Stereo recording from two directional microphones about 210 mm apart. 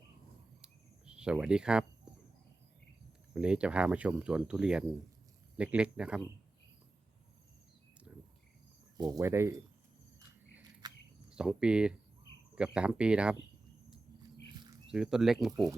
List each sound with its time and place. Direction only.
0.6 s cricket: 5° right (ahead or behind)
3.3 s speech: 5° right (ahead or behind)
8.1 s cricket: 5° right (ahead or behind)
9.0 s speech: 15° right (ahead or behind)
10.6 s biting: 20° right (ahead or behind)
11.3 s speech: 5° right (ahead or behind)
14.9 s speech: 5° right (ahead or behind)